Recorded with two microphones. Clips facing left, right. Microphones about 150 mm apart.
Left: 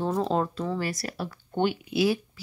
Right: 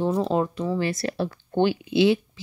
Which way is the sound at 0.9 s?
25° right (ahead or behind).